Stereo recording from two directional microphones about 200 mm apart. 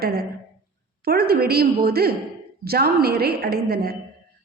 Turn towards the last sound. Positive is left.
turn(degrees=-50)  # may be behind; listen again after turning